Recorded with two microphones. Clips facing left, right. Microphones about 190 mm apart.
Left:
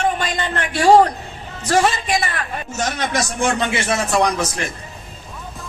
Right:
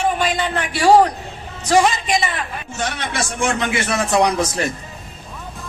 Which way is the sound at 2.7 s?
40° left (ahead or behind).